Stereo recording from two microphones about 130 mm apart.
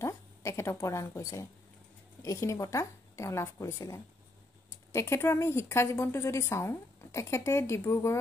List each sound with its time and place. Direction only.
0.0 s a woman's voice: 20° left (ahead or behind)